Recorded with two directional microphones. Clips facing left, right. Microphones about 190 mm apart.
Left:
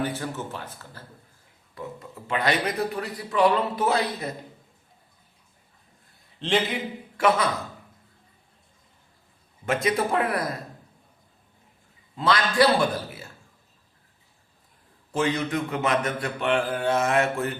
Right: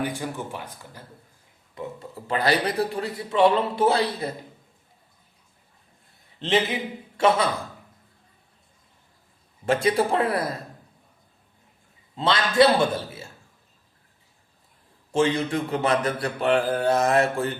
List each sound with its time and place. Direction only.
0.0 s speech: 15° right (ahead or behind)
1.7 s speech: 25° right (ahead or behind)
2.2 s a man's voice: 35° right (ahead or behind)
7.2 s speech: 25° right (ahead or behind)
9.6 s a man's voice: 30° right (ahead or behind)
12.1 s a man's voice: 25° right (ahead or behind)
15.1 s a man's voice: 30° right (ahead or behind)